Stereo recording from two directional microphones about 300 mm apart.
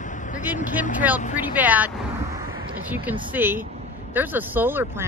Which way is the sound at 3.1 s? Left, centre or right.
Centre.